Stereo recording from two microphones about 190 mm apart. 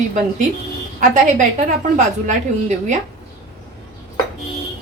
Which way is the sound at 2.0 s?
40° right (ahead or behind).